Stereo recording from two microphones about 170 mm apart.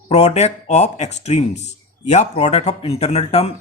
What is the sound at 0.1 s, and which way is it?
Speech, 40° left (ahead or behind).